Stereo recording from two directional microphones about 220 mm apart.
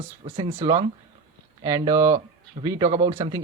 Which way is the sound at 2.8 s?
30° right (ahead or behind).